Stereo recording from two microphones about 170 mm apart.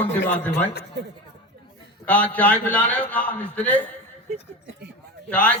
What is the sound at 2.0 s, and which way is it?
A man's voice, 10° left (ahead or behind).